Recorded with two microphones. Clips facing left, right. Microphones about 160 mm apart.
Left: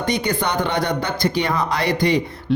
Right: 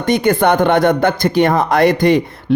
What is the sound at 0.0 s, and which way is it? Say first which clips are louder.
Speech: right 8 dB; 50° right (ahead or behind).